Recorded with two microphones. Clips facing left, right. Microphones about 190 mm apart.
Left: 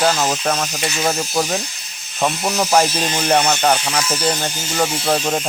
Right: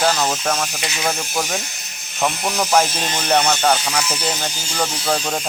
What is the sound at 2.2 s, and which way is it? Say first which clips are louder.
Speech: left 2 dB; 10° left (ahead or behind).